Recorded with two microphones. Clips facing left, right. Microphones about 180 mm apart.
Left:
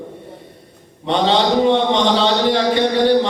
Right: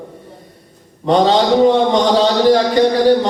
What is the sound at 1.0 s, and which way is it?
A man's voice, 40° right (ahead or behind).